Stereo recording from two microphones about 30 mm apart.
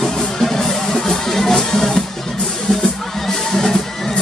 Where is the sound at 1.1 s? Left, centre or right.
Centre.